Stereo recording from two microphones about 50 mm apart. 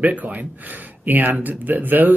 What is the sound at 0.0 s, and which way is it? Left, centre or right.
Speech, right.